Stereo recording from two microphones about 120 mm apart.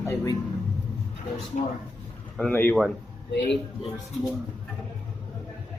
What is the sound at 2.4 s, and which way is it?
Speech, 15° left (ahead or behind).